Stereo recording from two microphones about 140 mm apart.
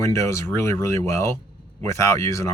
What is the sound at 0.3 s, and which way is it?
Speech, 20° left (ahead or behind).